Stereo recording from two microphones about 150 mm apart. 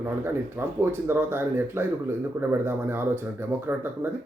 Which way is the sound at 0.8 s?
15° right (ahead or behind).